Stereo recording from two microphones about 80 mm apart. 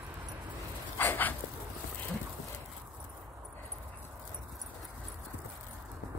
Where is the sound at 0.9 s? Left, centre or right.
Left.